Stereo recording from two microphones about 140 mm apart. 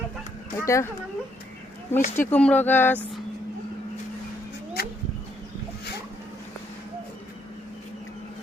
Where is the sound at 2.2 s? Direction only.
10° left (ahead or behind).